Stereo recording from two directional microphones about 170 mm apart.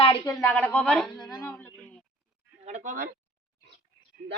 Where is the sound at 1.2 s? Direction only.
25° left (ahead or behind).